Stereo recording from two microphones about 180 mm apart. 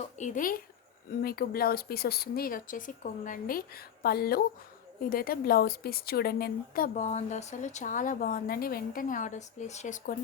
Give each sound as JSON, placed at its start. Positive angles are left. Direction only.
{"t": 0.2, "sound": "a woman's voice", "side_deg": 50}